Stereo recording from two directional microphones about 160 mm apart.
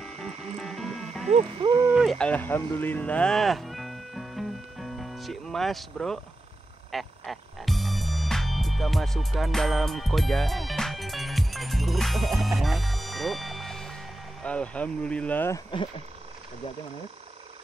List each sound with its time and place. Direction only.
0.0 s music: 5° left (ahead or behind)
1.3 s hoot: 35° right (ahead or behind)
1.9 s speech: centre (ahead or behind)
6.9 s music: centre (ahead or behind)
14.4 s speech: 5° left (ahead or behind)